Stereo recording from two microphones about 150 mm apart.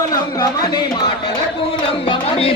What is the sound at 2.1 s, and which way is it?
Music, 40° left (ahead or behind).